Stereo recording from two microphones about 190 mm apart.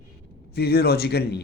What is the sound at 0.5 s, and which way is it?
Speech, 55° left (ahead or behind).